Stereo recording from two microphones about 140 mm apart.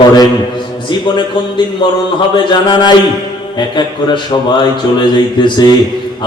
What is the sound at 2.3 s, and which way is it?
Mantra, 30° left (ahead or behind).